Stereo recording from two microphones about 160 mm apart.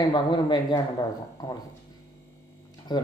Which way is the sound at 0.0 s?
30° left (ahead or behind).